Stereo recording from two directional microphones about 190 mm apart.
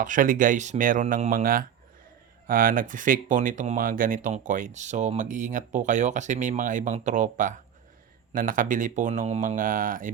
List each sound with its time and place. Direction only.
0.0 s speech: 45° right (ahead or behind)